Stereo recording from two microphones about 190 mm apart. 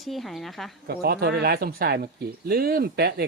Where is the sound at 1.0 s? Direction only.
55° right (ahead or behind).